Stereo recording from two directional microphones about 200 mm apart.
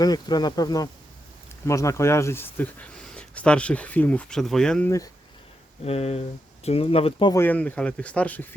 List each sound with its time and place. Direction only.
0.0 s speech: 20° left (ahead or behind); by 4.9 s 5° left (ahead or behind)
5.8 s speech: 30° left (ahead or behind)
7.3 s speech: 10° left (ahead or behind)